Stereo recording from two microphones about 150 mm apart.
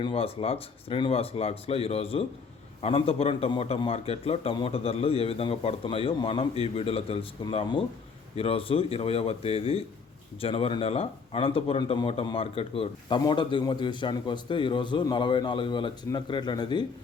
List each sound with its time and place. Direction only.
0.0 s a man's voice: 40° left (ahead or behind)